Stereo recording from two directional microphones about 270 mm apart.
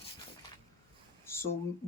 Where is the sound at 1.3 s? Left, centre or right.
Centre.